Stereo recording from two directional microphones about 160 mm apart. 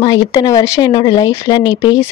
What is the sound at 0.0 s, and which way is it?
Speech, 25° left (ahead or behind).